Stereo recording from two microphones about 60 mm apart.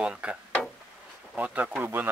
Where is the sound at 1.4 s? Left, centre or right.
Right.